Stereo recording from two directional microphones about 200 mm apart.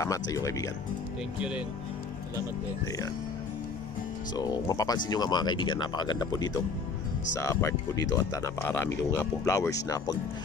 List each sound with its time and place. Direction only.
0.0 s speech: 15° left (ahead or behind)
4.4 s speech: 20° left (ahead or behind)